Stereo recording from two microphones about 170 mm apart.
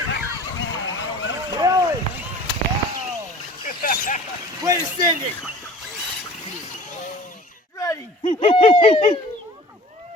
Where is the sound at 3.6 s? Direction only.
55° left (ahead or behind).